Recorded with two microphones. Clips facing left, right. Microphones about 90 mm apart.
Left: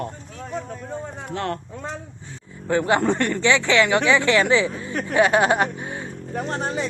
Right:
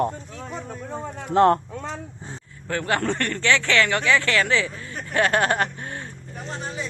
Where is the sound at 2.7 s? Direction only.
15° left (ahead or behind).